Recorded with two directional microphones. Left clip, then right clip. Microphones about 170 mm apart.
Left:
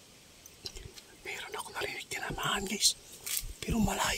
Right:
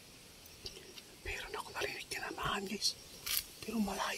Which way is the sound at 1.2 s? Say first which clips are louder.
Left 3 dB; 10° left (ahead or behind).